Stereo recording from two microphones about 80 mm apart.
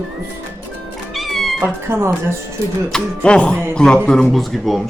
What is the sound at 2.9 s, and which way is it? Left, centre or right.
Speech, centre.